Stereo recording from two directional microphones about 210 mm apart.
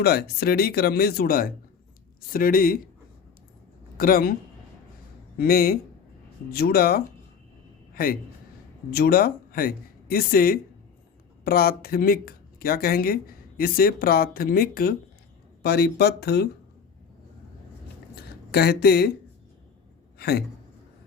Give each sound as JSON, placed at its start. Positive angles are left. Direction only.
{"t": 0.0, "sound": "speech", "side_deg": 50}
{"t": 3.9, "sound": "speech", "side_deg": 45}
{"t": 5.4, "sound": "a man's voice", "side_deg": 45}
{"t": 18.1, "sound": "a sound", "side_deg": 50}
{"t": 20.1, "sound": "speech", "side_deg": 50}